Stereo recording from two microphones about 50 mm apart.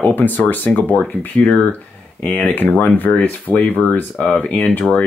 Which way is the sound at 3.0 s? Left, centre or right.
Left.